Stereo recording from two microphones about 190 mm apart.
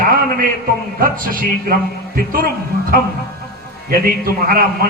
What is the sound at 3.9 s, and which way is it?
Music, 50° right (ahead or behind).